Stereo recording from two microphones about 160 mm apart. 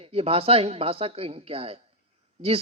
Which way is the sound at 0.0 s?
35° right (ahead or behind).